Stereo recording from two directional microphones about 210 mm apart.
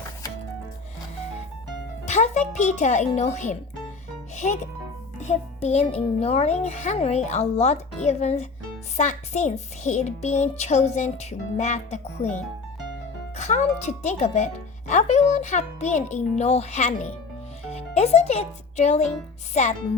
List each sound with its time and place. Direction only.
2.0 s a child's voice: 35° left (ahead or behind)